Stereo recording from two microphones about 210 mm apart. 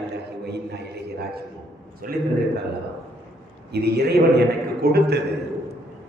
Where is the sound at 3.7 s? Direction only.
50° right (ahead or behind).